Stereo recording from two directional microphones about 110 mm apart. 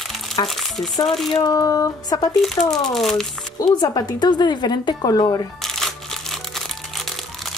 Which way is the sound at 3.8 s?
40° left (ahead or behind).